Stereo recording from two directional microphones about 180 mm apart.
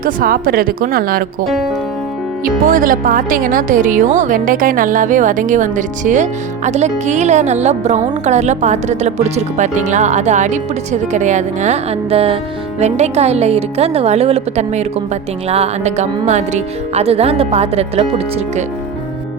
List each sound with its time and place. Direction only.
0.0 s speech: 55° right (ahead or behind)
2.4 s a woman's voice: 50° right (ahead or behind); by 18.6 s 35° right (ahead or behind)